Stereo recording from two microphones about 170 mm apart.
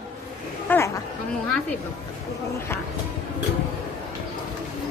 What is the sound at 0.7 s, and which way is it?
Chatter, 10° left (ahead or behind).